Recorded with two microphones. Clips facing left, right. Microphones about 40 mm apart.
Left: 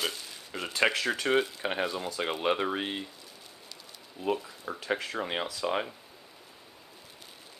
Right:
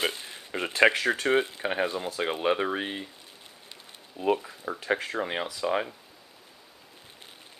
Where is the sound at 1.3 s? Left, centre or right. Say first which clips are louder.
Right 1 dB; right.